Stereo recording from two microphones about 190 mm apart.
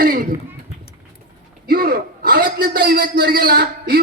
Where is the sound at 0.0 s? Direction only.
50° right (ahead or behind).